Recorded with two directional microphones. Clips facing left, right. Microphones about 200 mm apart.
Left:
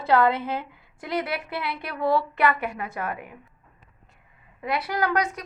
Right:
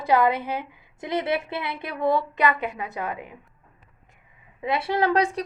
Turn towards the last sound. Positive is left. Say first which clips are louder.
# right 3 dB
turn(degrees=-30)  # may be behind; listen again after turning